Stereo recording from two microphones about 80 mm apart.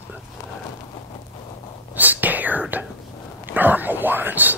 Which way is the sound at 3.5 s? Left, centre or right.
Right.